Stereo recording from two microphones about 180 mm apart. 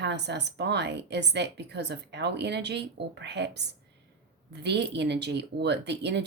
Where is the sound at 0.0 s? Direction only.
70° right (ahead or behind).